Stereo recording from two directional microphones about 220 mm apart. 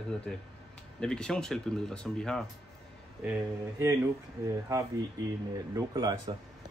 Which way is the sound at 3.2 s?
10° right (ahead or behind).